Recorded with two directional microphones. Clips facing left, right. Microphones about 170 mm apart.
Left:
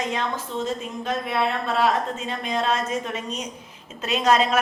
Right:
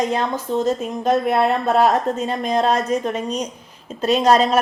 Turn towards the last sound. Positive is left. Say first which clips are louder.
# right 5 dB
turn(degrees=-35)  # may be behind; listen again after turning